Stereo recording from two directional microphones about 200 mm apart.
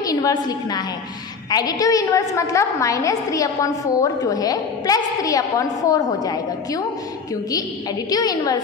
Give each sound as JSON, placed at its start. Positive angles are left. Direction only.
{"t": 0.0, "sound": "a woman's voice", "side_deg": 20}
{"t": 8.1, "sound": "a woman's voice", "side_deg": 20}